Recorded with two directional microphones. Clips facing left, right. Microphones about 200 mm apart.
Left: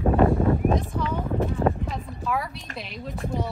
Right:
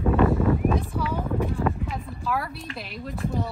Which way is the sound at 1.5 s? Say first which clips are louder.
Left 3 dB; 30° left (ahead or behind).